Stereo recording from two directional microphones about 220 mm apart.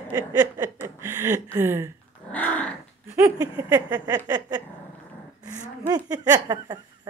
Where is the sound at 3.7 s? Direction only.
20° right (ahead or behind).